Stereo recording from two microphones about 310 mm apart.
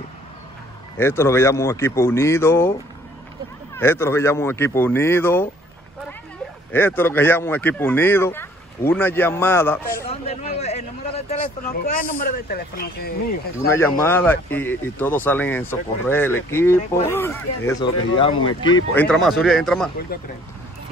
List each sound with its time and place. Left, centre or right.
0.9 s speech: centre
3.7 s speech: centre
6.7 s speech: centre
10.0 s speech: centre
13.7 s speech: centre
18.9 s speech: centre
20.1 s speech: left